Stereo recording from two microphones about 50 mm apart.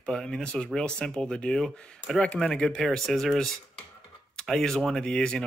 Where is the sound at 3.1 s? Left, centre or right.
Centre.